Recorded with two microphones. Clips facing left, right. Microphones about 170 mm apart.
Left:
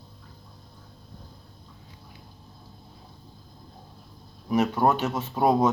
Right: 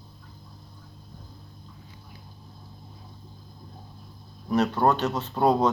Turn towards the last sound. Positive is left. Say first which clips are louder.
# even
turn(degrees=10)  # may be behind; listen again after turning